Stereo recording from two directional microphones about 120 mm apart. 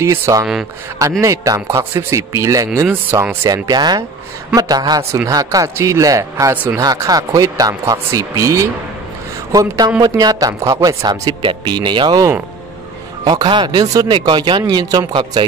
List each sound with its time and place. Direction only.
0.0 s speech: 25° right (ahead or behind)
3.4 s a man's voice: 30° right (ahead or behind)
6.5 s speech: 15° right (ahead or behind)
6.8 s a man's voice: 30° right (ahead or behind)
13.2 s a man's voice: 35° right (ahead or behind)